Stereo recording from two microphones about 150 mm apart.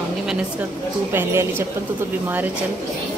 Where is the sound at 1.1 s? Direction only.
15° right (ahead or behind).